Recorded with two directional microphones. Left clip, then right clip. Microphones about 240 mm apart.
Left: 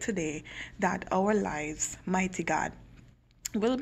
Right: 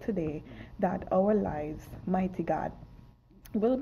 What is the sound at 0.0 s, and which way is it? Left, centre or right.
Speech, centre.